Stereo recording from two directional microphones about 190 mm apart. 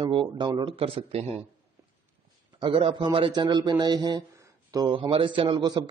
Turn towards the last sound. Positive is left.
turn(degrees=-20)  # may be behind; listen again after turning